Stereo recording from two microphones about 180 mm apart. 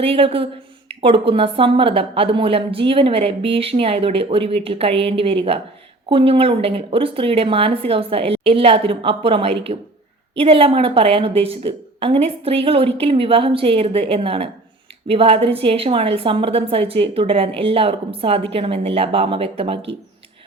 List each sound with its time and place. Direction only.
0.0 s a woman's voice: 30° right (ahead or behind)